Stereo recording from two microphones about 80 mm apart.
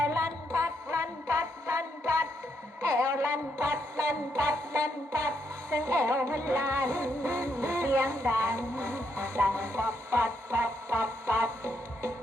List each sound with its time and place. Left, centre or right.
0.1 s music: right
2.8 s a sound: right
4.4 s music: right